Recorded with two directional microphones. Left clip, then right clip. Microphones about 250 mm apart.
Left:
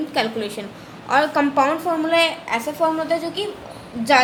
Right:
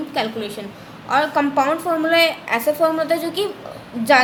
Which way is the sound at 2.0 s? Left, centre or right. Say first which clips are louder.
Right 3 dB; centre.